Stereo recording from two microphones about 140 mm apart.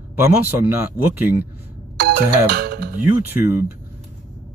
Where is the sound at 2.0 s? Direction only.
90° right.